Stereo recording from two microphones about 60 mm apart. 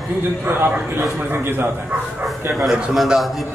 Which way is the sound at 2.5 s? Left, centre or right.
Centre.